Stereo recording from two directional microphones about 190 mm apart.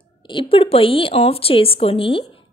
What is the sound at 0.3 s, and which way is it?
A woman's voice, 25° left (ahead or behind).